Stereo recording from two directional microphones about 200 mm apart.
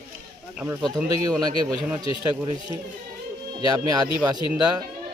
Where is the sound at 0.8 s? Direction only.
5° right (ahead or behind).